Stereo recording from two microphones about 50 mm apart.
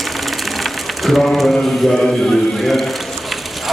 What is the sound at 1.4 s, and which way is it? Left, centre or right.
A man's voice, centre.